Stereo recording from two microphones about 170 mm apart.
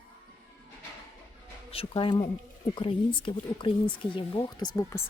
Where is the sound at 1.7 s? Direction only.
30° left (ahead or behind).